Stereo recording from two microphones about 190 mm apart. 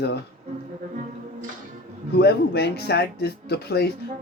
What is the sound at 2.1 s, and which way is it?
A man's voice, 60° left (ahead or behind).